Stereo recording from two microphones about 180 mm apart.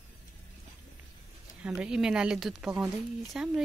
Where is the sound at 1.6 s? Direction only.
5° right (ahead or behind).